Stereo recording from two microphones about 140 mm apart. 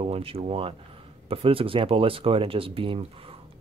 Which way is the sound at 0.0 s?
45° right (ahead or behind).